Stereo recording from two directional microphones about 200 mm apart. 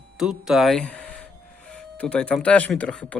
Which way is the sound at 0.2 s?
Centre (ahead or behind).